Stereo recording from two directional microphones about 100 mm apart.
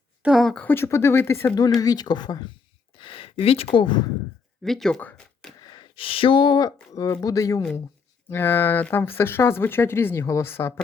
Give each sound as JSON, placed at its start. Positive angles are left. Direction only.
{"t": 0.2, "sound": "a sound", "side_deg": -5}
{"t": 0.4, "sound": "speech", "side_deg": 10}
{"t": 0.7, "sound": "speech", "side_deg": 25}
{"t": 1.5, "sound": "speech", "side_deg": 40}
{"t": 2.9, "sound": "a sound", "side_deg": 60}
{"t": 3.4, "sound": "speech", "side_deg": 80}
{"t": 4.6, "sound": "speech", "side_deg": 5}
{"t": 4.9, "sound": "speech", "side_deg": 15}
{"t": 5.6, "sound": "speech", "side_deg": 55}
{"t": 6.9, "sound": "speech", "side_deg": 35}
{"t": 8.3, "sound": "speech", "side_deg": 20}